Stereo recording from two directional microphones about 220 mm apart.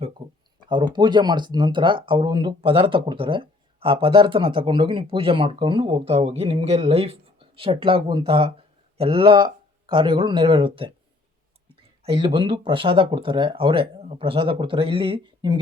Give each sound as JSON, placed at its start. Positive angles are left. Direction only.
{"t": 0.9, "sound": "speech", "side_deg": -20}
{"t": 12.0, "sound": "speech", "side_deg": -25}